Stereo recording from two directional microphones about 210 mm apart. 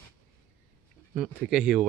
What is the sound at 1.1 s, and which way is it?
Speech, 5° right (ahead or behind).